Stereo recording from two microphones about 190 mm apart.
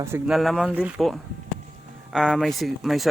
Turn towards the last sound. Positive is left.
turn(degrees=0)  # may be behind; listen again after turning